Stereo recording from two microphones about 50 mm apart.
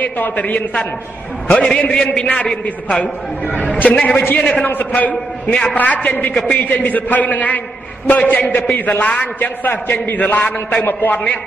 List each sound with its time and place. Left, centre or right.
0.0 s a man's voice: left
1.5 s a man's voice: centre
3.0 s a man's voice: left
9.4 s a man's voice: left